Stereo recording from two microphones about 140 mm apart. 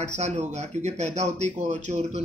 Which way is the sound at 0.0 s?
60° right (ahead or behind).